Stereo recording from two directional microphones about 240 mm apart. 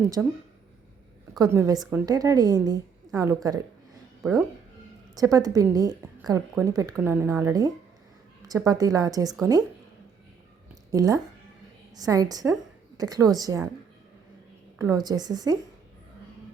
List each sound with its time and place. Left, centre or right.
0.2 s a woman's voice: centre
1.4 s a woman's voice: centre
10.9 s a woman's voice: centre
14.8 s a woman's voice: centre